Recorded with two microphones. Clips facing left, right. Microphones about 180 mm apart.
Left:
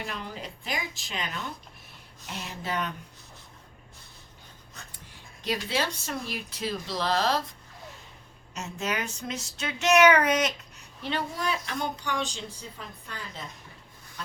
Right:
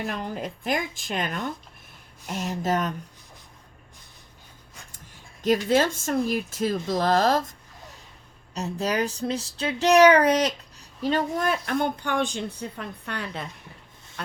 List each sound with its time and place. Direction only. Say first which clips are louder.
0.0 s speech: right 6 dB; 50° right (ahead or behind)
5.4 s speech: right 9 dB; 45° right (ahead or behind)
8.5 s speech: right 6 dB; 35° right (ahead or behind); by 13.4 s 70° right (ahead or behind)